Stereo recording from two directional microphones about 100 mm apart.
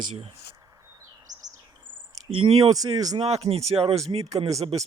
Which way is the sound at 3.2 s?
80° right.